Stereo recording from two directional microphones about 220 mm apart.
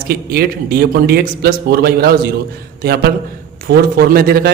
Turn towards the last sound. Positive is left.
turn(degrees=-40)  # may be behind; listen again after turning